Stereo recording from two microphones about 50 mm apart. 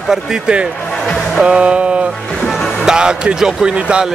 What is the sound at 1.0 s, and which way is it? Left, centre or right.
Music, centre.